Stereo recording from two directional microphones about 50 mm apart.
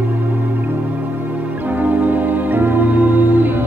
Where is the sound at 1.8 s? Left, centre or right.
Right.